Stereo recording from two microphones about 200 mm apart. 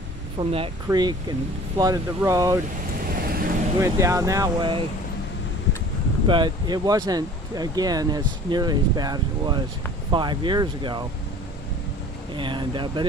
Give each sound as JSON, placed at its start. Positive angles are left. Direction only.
{"t": 0.4, "sound": "speech", "side_deg": -30}
{"t": 3.2, "sound": "vehicle", "side_deg": -45}
{"t": 3.8, "sound": "speech", "side_deg": -15}
{"t": 6.2, "sound": "speech", "side_deg": -25}
{"t": 12.4, "sound": "speech", "side_deg": -25}